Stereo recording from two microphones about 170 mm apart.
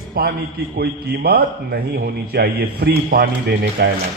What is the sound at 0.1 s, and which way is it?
A man's voice, 65° right (ahead or behind).